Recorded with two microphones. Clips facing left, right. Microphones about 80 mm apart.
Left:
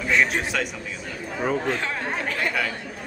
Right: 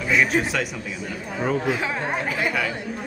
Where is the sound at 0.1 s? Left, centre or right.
Centre.